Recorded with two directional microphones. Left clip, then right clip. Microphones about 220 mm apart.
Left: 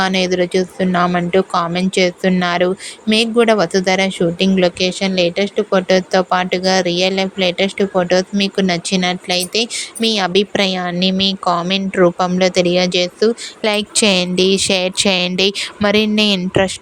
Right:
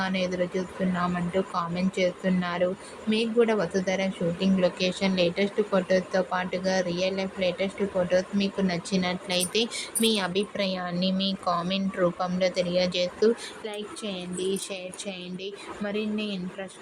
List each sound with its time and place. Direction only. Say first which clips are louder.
0.0 s a woman's voice: left 12 dB; 45° left (ahead or behind)
13.6 s a woman's voice: left 19 dB; 50° left (ahead or behind)